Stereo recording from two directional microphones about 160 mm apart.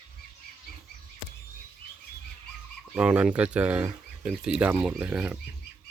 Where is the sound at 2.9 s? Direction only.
5° right (ahead or behind).